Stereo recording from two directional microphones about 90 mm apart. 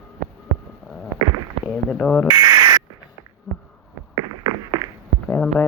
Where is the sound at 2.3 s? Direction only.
50° right (ahead or behind).